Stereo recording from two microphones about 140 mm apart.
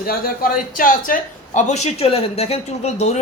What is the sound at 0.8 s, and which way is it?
A woman's voice, 80° left.